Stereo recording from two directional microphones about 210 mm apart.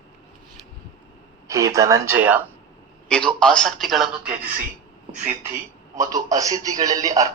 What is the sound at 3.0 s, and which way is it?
A man's voice, 5° left (ahead or behind).